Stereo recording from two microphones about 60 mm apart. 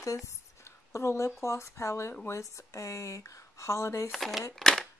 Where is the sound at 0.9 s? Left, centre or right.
Left.